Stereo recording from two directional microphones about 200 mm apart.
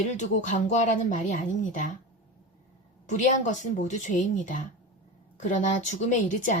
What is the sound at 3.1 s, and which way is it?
Speech, 40° left (ahead or behind).